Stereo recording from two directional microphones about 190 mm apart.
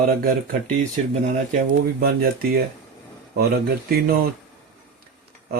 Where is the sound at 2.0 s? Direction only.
55° right (ahead or behind).